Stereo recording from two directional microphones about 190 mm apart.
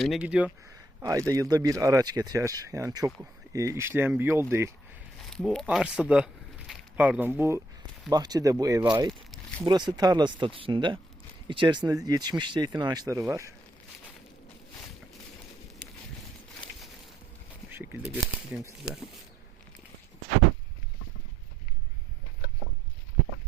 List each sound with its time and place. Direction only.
0.0 s speech: 5° right (ahead or behind)
5.2 s speech: centre (ahead or behind); by 9.0 s 20° right (ahead or behind)
9.0 s a sound: 5° left (ahead or behind)
9.6 s speech: 20° right (ahead or behind)
17.7 s speech: 10° right (ahead or behind)